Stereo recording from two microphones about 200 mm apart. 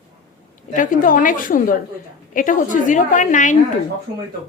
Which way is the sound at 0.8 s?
45° left (ahead or behind).